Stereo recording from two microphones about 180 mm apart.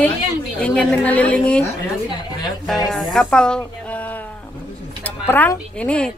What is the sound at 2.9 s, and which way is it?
A woman's voice, centre (ahead or behind).